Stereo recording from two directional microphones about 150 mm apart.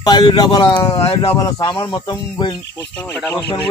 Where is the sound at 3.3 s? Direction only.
15° left (ahead or behind).